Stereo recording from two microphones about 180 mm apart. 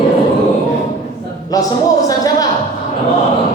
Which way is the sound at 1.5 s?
20° left (ahead or behind).